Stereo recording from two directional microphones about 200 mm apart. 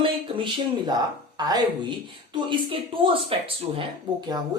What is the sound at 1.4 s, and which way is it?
Speech, 20° right (ahead or behind).